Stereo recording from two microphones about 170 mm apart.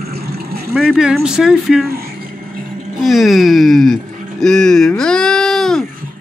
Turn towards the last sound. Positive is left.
turn(degrees=5)  # may be behind; listen again after turning